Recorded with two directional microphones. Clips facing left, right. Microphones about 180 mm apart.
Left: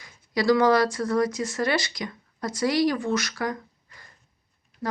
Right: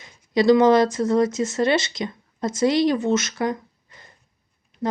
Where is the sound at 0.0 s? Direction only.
20° right (ahead or behind).